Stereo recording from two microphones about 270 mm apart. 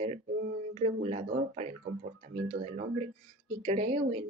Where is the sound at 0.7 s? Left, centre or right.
Right.